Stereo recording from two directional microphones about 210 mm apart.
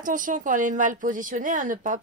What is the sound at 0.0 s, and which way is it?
A woman's voice, 40° right (ahead or behind).